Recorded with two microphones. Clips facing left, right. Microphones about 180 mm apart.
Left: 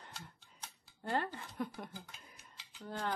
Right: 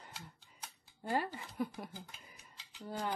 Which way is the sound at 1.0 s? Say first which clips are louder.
Right 1 dB; 10° right (ahead or behind).